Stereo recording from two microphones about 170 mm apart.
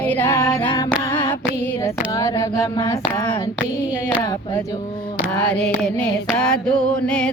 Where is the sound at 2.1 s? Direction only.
20° left (ahead or behind).